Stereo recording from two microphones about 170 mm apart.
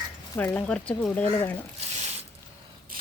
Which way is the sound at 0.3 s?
10° left (ahead or behind).